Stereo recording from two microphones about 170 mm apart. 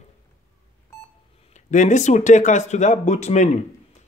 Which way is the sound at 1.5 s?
45° left (ahead or behind).